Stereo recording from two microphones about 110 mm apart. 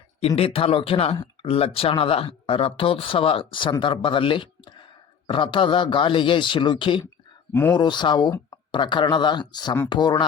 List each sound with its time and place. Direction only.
0.2 s speech: 65° left (ahead or behind); by 7.0 s 45° left (ahead or behind)
7.5 s speech: 20° left (ahead or behind)
7.8 s speech: 40° left (ahead or behind)